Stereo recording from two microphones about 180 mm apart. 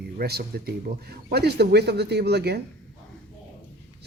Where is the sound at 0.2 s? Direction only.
60° right (ahead or behind).